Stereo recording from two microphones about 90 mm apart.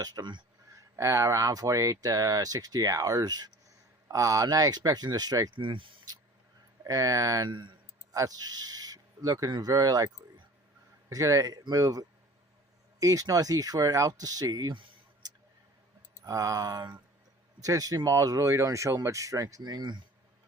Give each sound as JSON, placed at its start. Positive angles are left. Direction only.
{"t": 0.0, "sound": "speech", "side_deg": -50}
{"t": 0.8, "sound": "speech", "side_deg": -35}
{"t": 5.5, "sound": "speech", "side_deg": -70}
{"t": 6.8, "sound": "speech", "side_deg": -40}
{"t": 7.4, "sound": "speech", "side_deg": -65}
{"t": 8.1, "sound": "speech", "side_deg": -45}
{"t": 11.1, "sound": "speech", "side_deg": -40}
{"t": 16.2, "sound": "speech", "side_deg": -40}